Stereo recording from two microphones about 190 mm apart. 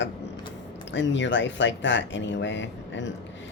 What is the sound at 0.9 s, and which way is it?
Speech, 75° left (ahead or behind).